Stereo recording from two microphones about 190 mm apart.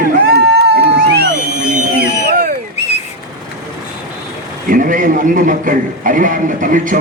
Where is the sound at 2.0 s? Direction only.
50° right (ahead or behind).